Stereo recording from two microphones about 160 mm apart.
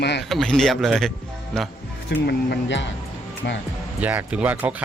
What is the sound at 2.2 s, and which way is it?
Speech, 90° left.